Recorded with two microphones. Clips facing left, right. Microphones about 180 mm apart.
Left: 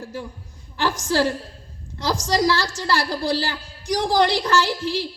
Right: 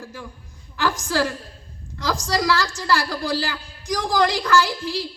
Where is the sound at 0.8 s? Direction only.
30° left (ahead or behind).